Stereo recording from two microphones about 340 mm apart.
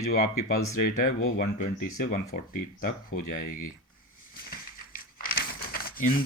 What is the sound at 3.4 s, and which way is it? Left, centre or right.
Speech, left.